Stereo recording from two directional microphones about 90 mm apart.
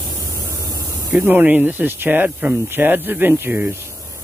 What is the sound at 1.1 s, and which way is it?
Speech, 20° right (ahead or behind).